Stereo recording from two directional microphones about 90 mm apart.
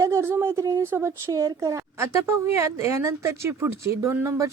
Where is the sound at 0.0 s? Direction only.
30° right (ahead or behind).